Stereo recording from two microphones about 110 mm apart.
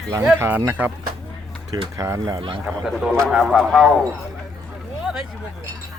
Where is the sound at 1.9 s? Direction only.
30° right (ahead or behind).